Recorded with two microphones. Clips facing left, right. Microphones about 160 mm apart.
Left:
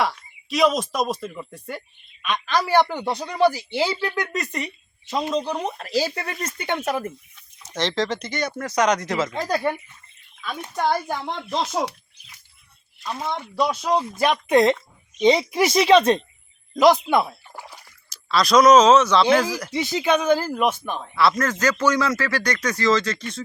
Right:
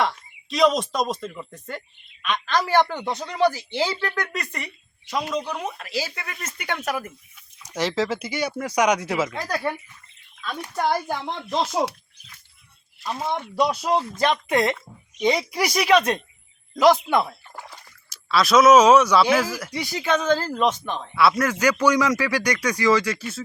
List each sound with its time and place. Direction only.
0.5 s a man's voice: 5° left (ahead or behind); by 7.1 s 25° left (ahead or behind)
7.8 s speech: 5° right (ahead or behind)
9.3 s speech: 20° left (ahead or behind)
10.8 s speech: centre (ahead or behind)
13.0 s speech: 5° right (ahead or behind)
14.0 s speech: 15° left (ahead or behind)
16.7 s speech: 15° left (ahead or behind)
18.1 s speech: 5° right (ahead or behind)
19.7 s a man's voice: 20° left (ahead or behind)
21.2 s speech: 10° right (ahead or behind)